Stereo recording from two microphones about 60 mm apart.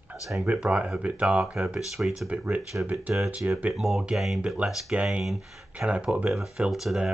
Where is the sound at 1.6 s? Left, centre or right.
Centre.